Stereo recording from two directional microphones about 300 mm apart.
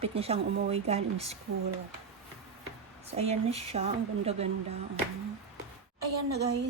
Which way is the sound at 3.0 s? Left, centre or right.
Right.